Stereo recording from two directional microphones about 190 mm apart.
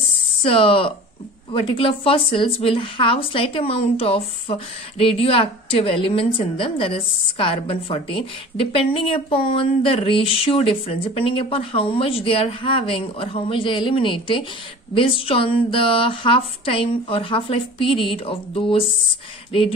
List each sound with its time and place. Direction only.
0.4 s a woman's voice: 30° left (ahead or behind)